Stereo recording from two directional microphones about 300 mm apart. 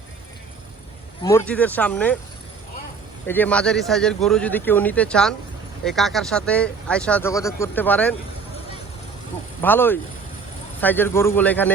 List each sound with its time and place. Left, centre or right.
1.2 s speech: centre
3.2 s speech: centre
9.6 s a man's voice: centre